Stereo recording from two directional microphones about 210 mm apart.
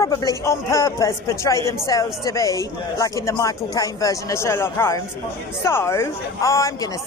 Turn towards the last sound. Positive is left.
turn(degrees=15)  # may be behind; listen again after turning